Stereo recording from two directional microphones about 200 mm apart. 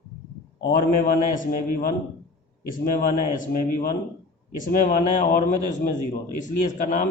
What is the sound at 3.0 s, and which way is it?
Speech, 40° left (ahead or behind).